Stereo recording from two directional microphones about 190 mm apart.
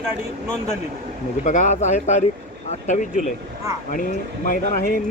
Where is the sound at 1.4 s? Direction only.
40° left (ahead or behind).